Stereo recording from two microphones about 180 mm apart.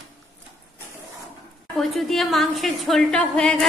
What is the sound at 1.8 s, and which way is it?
A woman's voice, centre (ahead or behind).